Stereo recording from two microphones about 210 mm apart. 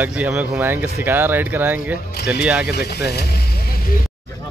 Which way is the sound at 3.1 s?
50° left (ahead or behind).